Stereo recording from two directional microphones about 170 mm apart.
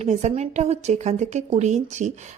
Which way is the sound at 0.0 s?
40° right (ahead or behind).